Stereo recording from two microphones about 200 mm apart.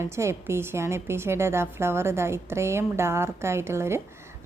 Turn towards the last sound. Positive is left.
turn(degrees=-15)  # may be behind; listen again after turning